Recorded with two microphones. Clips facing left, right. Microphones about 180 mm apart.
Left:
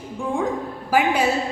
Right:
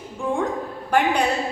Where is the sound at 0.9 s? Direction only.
5° left (ahead or behind).